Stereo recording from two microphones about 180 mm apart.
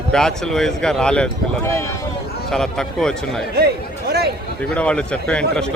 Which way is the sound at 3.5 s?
65° right (ahead or behind).